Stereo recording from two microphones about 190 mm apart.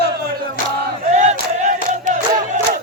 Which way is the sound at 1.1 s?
40° right (ahead or behind).